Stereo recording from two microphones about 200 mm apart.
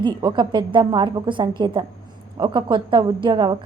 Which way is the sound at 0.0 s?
25° right (ahead or behind).